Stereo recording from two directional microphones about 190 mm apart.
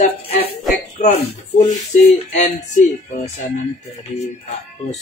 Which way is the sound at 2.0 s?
40° left (ahead or behind).